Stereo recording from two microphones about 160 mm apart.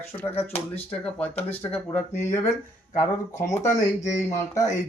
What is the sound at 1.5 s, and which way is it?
Speech, 10° left (ahead or behind).